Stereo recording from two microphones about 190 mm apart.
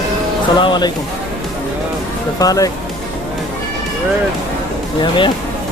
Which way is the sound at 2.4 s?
20° left (ahead or behind).